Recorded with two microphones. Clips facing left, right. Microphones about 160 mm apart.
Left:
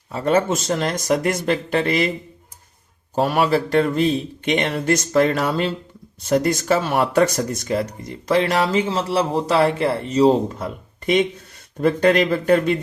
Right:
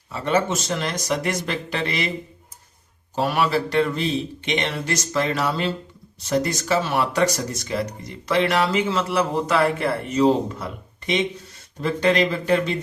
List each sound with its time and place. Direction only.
0.1 s speech: 40° left (ahead or behind)
3.2 s speech: 45° left (ahead or behind)